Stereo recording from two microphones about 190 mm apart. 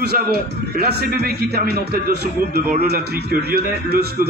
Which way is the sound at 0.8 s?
55° right (ahead or behind).